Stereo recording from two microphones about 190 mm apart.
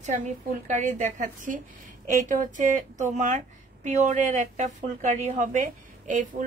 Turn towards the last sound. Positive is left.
turn(degrees=-40)  # may be behind; listen again after turning